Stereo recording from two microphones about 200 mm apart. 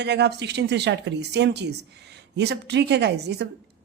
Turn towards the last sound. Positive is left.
turn(degrees=-55)  # may be behind; listen again after turning